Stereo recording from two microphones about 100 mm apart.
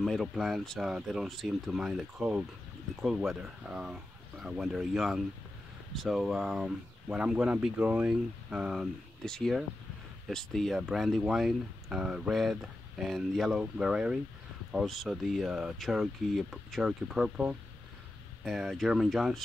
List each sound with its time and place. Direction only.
0.0 s speech: centre (ahead or behind)
9.2 s speech: 5° left (ahead or behind)